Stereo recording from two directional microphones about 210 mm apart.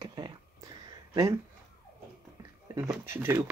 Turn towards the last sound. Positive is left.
turn(degrees=-10)  # may be behind; listen again after turning